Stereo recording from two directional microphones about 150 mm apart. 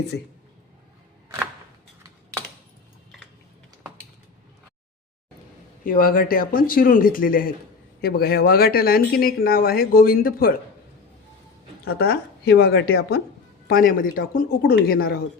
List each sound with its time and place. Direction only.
5.8 s speech: 70° left (ahead or behind)
8.0 s speech: 90° left
11.9 s speech: 90° left
13.7 s speech: 70° left (ahead or behind)